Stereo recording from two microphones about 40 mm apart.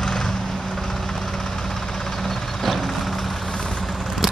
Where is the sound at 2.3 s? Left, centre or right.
Centre.